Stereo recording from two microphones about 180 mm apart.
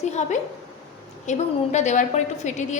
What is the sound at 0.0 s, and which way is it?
A woman's voice, 40° left (ahead or behind).